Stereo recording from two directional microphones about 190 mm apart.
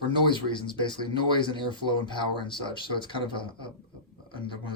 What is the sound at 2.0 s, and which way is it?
Speech, 25° left (ahead or behind).